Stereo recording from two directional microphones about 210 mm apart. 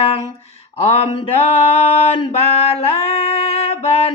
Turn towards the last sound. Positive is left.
turn(degrees=30)  # may be behind; listen again after turning